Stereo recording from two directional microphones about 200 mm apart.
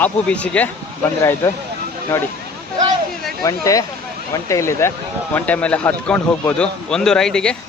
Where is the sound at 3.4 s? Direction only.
15° left (ahead or behind).